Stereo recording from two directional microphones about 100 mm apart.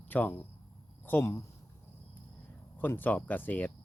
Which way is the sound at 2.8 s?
20° left (ahead or behind).